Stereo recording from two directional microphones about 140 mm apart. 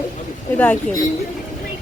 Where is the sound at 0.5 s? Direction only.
10° left (ahead or behind).